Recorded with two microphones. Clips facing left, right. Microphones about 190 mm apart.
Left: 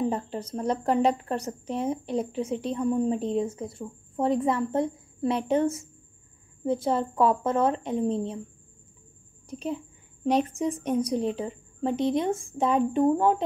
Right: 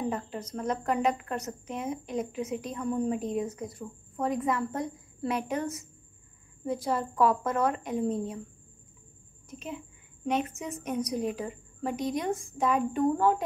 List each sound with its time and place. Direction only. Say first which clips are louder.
0.1 s speech: left 4 dB; 30° left (ahead or behind)
9.5 s a woman's voice: left 7 dB; 35° left (ahead or behind)